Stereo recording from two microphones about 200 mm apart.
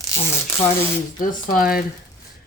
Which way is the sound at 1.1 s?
45° left (ahead or behind).